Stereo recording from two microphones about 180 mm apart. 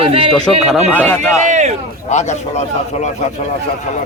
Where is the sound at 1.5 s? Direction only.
40° right (ahead or behind).